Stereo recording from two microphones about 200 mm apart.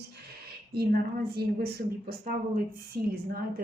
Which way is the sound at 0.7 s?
50° right (ahead or behind).